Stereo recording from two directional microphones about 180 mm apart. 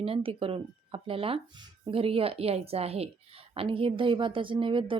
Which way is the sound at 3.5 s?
30° right (ahead or behind).